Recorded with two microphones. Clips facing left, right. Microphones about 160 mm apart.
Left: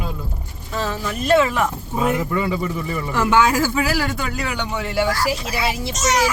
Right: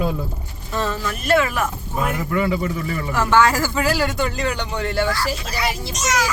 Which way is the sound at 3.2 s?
10° left (ahead or behind).